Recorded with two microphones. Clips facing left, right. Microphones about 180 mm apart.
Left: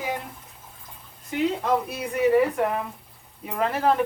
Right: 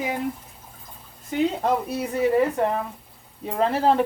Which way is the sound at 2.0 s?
30° right (ahead or behind).